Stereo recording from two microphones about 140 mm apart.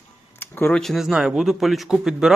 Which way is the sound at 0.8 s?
Centre (ahead or behind).